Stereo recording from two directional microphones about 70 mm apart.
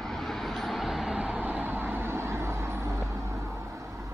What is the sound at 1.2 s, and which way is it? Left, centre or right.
Vehicle, centre.